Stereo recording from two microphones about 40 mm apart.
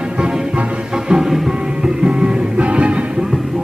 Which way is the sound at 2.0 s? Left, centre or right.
Right.